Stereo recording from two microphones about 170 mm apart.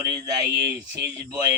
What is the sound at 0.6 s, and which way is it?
Speech, 80° right.